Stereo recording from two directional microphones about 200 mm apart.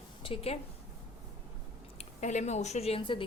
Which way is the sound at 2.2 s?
35° left (ahead or behind).